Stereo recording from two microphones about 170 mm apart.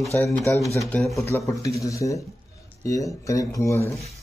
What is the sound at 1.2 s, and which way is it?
Speech, 15° left (ahead or behind).